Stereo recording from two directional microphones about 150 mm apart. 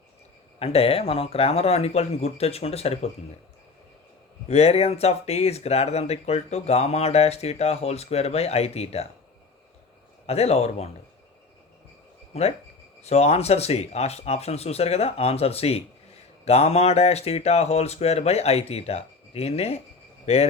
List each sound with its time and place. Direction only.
0.6 s speech: 40° left (ahead or behind)
4.4 s speech: 45° left (ahead or behind)
10.2 s speech: 45° left (ahead or behind)
12.3 s speech: 45° left (ahead or behind)